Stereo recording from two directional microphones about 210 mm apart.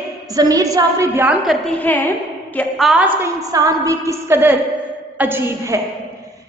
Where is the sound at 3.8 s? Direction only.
15° right (ahead or behind).